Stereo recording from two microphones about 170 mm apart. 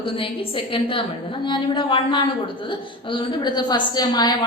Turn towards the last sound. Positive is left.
turn(degrees=25)  # may be behind; listen again after turning